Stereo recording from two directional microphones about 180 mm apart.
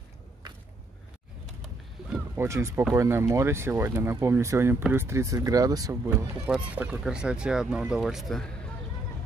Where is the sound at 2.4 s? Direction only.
15° right (ahead or behind); by 8.7 s 5° left (ahead or behind).